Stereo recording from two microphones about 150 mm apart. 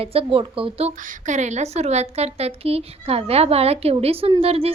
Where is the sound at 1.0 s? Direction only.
55° right (ahead or behind).